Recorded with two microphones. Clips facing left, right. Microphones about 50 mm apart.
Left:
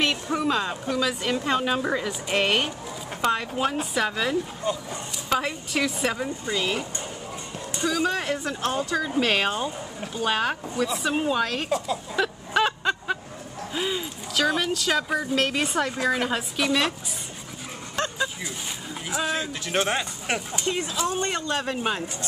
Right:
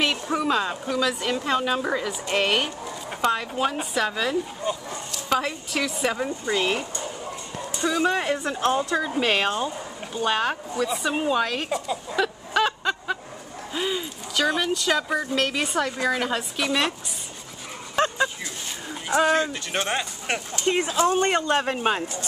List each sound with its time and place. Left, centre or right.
0.0 s speech: centre
4.6 s speech: centre
5.3 s speech: centre
6.2 s a woman's voice: right; by 16.9 s centre
17.9 s bow-wow: centre
19.2 s speech: centre
20.6 s speech: right